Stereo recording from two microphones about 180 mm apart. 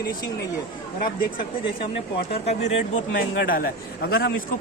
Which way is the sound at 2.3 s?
35° left (ahead or behind).